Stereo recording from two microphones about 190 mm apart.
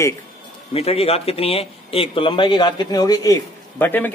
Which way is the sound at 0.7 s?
30° left (ahead or behind).